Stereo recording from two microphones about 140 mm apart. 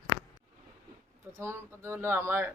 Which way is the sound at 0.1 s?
40° left (ahead or behind).